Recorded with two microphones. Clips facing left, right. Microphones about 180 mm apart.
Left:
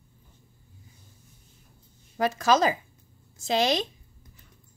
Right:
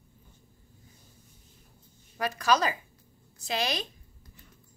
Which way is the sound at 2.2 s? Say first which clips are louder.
Left 4 dB; 25° left (ahead or behind).